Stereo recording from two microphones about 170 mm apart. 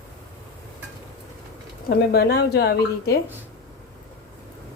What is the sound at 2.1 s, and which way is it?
Speech, 70° left (ahead or behind).